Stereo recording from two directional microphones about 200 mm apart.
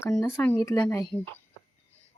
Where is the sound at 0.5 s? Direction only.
15° left (ahead or behind).